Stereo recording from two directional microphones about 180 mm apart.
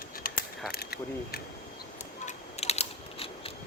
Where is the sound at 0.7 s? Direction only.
60° left (ahead or behind).